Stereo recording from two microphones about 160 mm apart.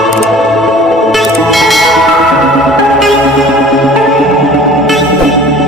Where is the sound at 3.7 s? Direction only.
Centre (ahead or behind).